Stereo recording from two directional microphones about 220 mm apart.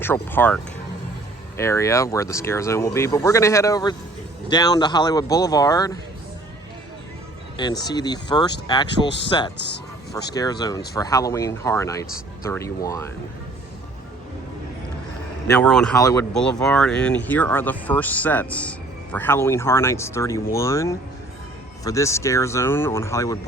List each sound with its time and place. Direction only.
0.0 s speech: 10° left (ahead or behind)
7.5 s speech: 20° left (ahead or behind)
15.5 s speech: 5° left (ahead or behind)